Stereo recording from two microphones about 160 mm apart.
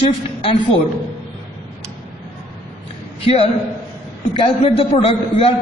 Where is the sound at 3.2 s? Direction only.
35° left (ahead or behind).